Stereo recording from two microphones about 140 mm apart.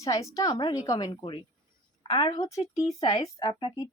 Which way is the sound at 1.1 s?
40° left (ahead or behind).